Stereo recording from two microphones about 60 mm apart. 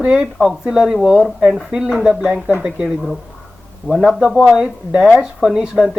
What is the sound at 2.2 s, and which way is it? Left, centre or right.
Speech, centre.